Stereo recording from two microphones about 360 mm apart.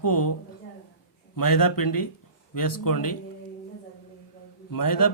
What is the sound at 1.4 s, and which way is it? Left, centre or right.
A man's voice, left.